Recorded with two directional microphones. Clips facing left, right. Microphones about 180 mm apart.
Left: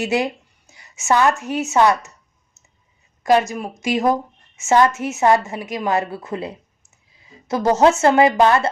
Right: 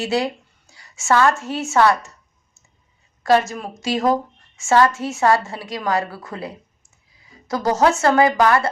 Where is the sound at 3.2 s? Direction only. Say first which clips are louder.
Left 1 dB; 15° left (ahead or behind).